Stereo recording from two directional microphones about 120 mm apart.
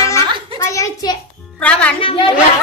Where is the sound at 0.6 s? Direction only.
25° left (ahead or behind).